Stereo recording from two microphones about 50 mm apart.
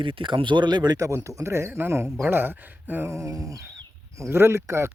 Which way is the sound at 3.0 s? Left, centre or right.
Right.